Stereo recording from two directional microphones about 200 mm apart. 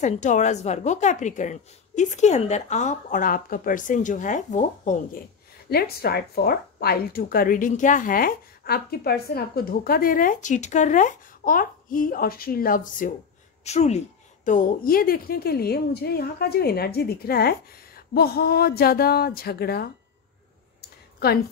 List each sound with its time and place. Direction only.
0.0 s speech: 35° left (ahead or behind)
5.7 s speech: 50° left (ahead or behind)